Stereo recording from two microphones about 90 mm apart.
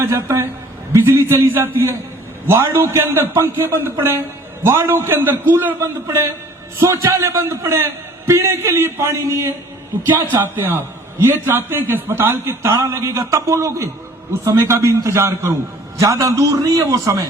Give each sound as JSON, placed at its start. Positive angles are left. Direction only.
{"t": 0.0, "sound": "a man's voice", "side_deg": -30}